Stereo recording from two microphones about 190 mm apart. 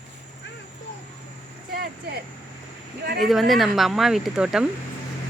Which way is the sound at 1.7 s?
55° right (ahead or behind).